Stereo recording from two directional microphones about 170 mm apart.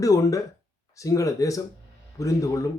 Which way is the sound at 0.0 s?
20° left (ahead or behind).